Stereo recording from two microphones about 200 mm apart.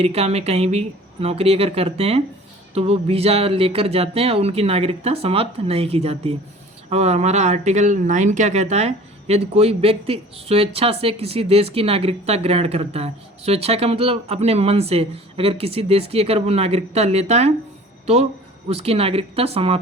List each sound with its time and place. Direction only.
0.0 s speech: 30° right (ahead or behind)